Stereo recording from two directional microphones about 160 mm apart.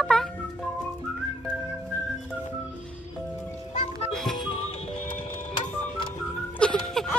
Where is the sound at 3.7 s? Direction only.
45° left (ahead or behind).